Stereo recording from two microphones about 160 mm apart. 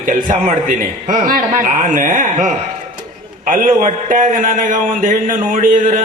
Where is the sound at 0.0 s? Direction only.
60° right (ahead or behind).